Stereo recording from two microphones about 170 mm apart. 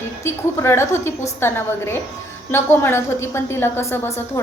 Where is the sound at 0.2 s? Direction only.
15° left (ahead or behind).